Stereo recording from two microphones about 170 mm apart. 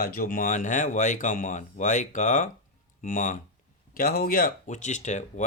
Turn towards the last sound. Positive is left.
turn(degrees=45)  # may be behind; listen again after turning